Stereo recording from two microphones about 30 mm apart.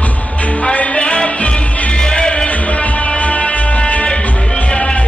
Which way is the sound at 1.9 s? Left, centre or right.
Left.